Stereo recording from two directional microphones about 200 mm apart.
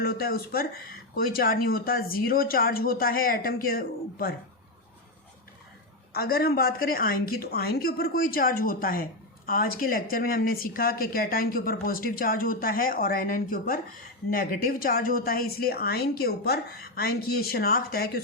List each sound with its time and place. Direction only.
0.0 s speech: 50° left (ahead or behind)
6.1 s speech: 50° left (ahead or behind)